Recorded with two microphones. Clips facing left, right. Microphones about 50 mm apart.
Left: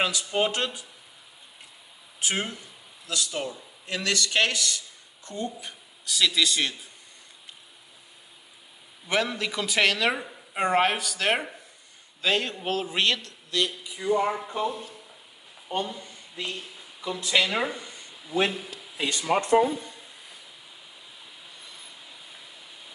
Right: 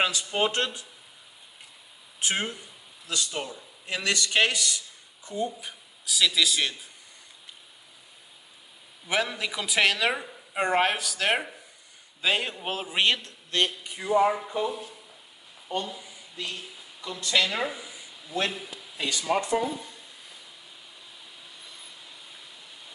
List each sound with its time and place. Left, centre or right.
0.0 s speech: centre
2.2 s a man's voice: centre
9.0 s a man's voice: centre
13.5 s speech: right
14.0 s a man's voice: centre
15.9 s a sound: centre
16.4 s speech: centre
17.0 s a woman's voice: centre
17.6 s a sound: centre
18.1 s a sound: centre
19.1 s a woman's voice: centre
19.6 s a sound: centre
21.5 s vehicle: centre